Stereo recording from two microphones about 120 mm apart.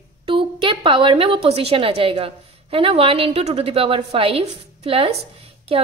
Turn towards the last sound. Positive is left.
turn(degrees=-55)  # may be behind; listen again after turning